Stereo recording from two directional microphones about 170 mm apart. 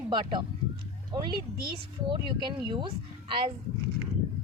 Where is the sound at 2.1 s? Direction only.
25° right (ahead or behind).